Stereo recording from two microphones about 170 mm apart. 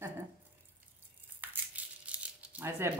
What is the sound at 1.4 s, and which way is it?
Crumpling, 10° right (ahead or behind).